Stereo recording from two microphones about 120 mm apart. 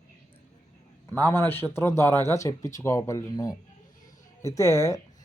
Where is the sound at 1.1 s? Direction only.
15° left (ahead or behind).